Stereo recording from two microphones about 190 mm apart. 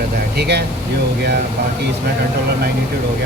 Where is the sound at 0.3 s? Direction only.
60° right (ahead or behind).